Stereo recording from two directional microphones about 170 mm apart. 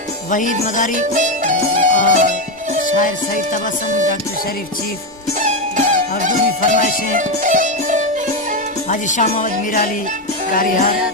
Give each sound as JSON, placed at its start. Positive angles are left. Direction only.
{"t": 0.3, "sound": "speech", "side_deg": 50}
{"t": 0.9, "sound": "music", "side_deg": -45}
{"t": 5.4, "sound": "music", "side_deg": -50}
{"t": 8.9, "sound": "speech", "side_deg": 45}